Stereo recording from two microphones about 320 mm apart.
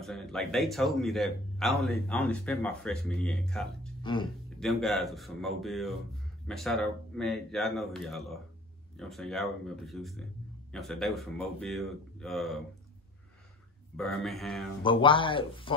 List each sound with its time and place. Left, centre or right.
0.0 s a man's voice: centre
4.0 s speech: centre
4.6 s a man's voice: centre
13.9 s a man's voice: centre
14.8 s speech: centre